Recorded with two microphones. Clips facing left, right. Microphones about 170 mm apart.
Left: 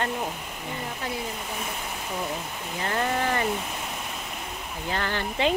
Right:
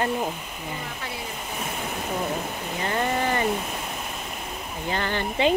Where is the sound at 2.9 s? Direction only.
5° right (ahead or behind).